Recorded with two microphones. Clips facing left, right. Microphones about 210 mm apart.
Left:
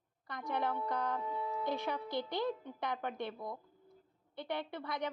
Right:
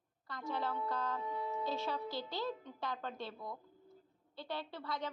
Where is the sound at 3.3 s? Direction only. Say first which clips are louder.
Left 3 dB; 30° left (ahead or behind).